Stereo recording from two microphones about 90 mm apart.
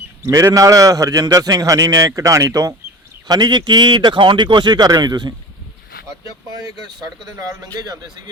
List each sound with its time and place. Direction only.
0.2 s a man's voice: 35° right (ahead or behind)
3.2 s speech: 50° right (ahead or behind)
6.6 s speech: 45° right (ahead or behind)